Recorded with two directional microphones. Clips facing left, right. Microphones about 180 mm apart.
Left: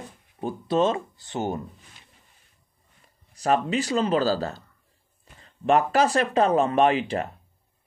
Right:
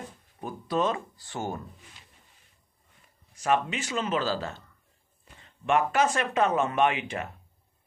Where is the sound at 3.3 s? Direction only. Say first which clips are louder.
Left 4 dB; 35° left (ahead or behind).